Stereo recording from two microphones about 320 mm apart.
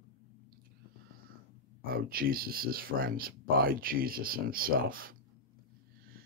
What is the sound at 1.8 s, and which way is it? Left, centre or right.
Speech, right.